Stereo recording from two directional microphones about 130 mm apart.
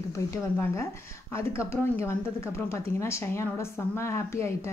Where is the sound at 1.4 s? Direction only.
20° left (ahead or behind).